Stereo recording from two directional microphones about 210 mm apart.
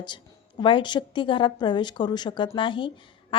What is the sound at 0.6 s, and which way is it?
A woman's voice, 20° left (ahead or behind).